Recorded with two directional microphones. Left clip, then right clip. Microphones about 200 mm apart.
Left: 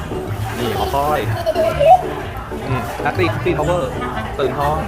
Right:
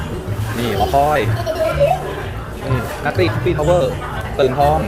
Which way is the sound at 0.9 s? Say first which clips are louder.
Right 4 dB; 10° right (ahead or behind).